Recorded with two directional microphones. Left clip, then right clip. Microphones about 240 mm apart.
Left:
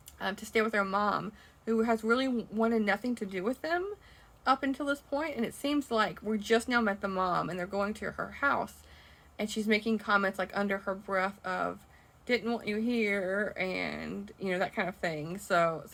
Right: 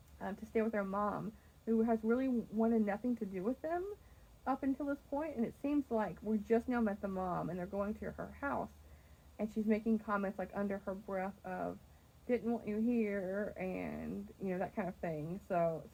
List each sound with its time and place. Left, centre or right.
0.2 s speech: centre